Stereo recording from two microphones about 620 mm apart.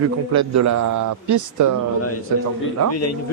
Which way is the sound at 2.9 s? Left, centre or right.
Left.